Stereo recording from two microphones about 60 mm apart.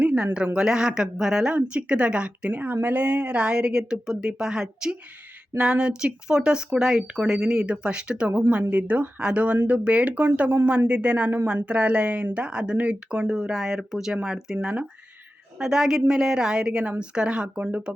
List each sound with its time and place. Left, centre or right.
0.0 s a sound: centre
0.5 s speech: centre
2.5 s speech: right
8.3 s speech: right